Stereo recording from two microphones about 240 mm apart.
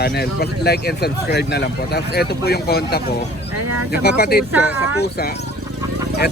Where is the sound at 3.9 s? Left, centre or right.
Left.